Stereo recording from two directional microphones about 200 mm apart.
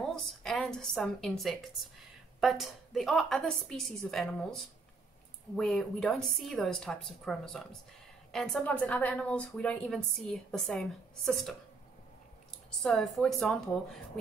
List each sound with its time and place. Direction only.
0.0 s a sound: centre (ahead or behind)
2.4 s a woman's voice: centre (ahead or behind)
5.6 s a woman's voice: centre (ahead or behind)
12.8 s a woman's voice: 5° left (ahead or behind)